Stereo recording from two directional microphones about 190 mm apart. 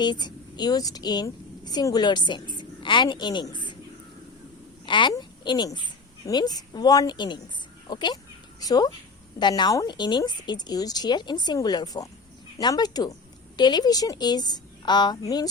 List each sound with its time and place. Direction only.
0.0 s a woman's voice: 25° left (ahead or behind)
4.9 s a woman's voice: 25° left (ahead or behind)